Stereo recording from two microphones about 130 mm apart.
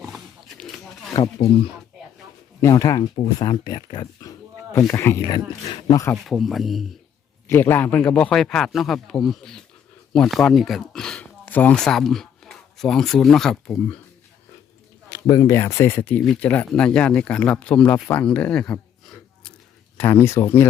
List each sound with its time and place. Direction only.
0.1 s wild animals: centre (ahead or behind)
2.6 s speech: 25° left (ahead or behind)
4.8 s speech: 20° left (ahead or behind)
5.3 s speech: 30° left (ahead or behind)
6.2 s a man's voice: centre (ahead or behind)
7.4 s a man's voice: 20° left (ahead or behind); by 13.6 s 5° left (ahead or behind)
13.7 s speech: 15° left (ahead or behind)
15.1 s speech: 25° left (ahead or behind); by 19.5 s 5° left (ahead or behind)
20.0 s speech: 20° left (ahead or behind)